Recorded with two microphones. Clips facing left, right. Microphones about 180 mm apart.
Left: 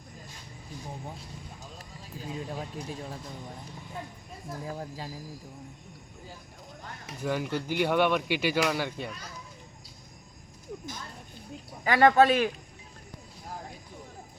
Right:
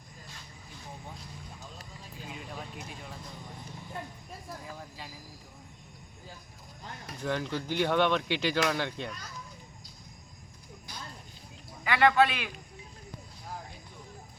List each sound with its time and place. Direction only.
2.3 s speech: 35° left (ahead or behind)
4.8 s speech: 40° left (ahead or behind)
7.1 s speech: 10° left (ahead or behind)
11.9 s a man's voice: 40° left (ahead or behind)